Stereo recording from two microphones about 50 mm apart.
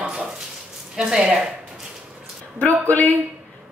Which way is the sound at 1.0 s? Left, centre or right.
Centre.